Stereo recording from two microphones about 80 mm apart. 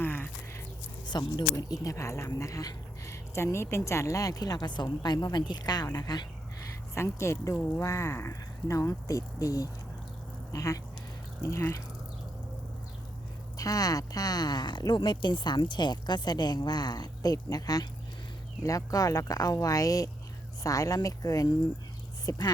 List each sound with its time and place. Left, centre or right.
0.0 s a sound: left
1.0 s speech: left
1.5 s speech: left
6.9 s speech: left
13.6 s speech: left